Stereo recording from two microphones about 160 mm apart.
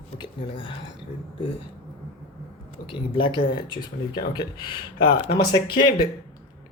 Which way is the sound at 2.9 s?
30° left (ahead or behind).